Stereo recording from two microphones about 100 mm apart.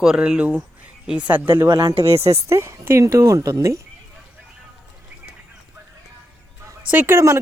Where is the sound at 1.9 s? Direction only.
80° right.